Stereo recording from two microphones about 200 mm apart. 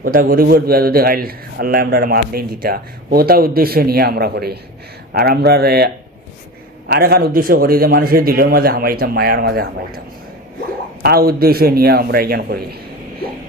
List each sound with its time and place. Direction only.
0.0 s a man's voice: 45° right (ahead or behind)
11.0 s a man's voice: 50° right (ahead or behind)